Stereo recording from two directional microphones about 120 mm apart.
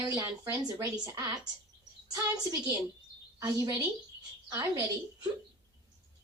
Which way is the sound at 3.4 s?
30° right (ahead or behind).